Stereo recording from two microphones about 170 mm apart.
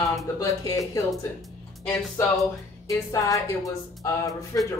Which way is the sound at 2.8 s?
20° left (ahead or behind).